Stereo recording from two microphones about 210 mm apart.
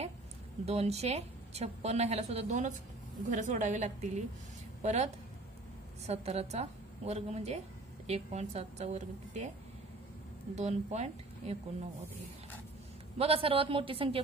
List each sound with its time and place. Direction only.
0.7 s a woman's voice: 30° right (ahead or behind)
10.5 s a woman's voice: 30° right (ahead or behind)
13.2 s a woman's voice: 25° right (ahead or behind)